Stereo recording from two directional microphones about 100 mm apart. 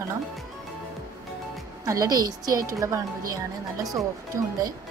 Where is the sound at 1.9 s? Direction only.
35° right (ahead or behind).